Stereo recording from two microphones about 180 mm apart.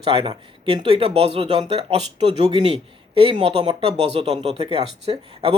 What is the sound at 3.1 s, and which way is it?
A man's voice, 30° right (ahead or behind).